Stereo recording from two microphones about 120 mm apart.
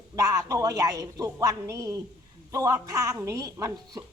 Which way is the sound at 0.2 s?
25° right (ahead or behind).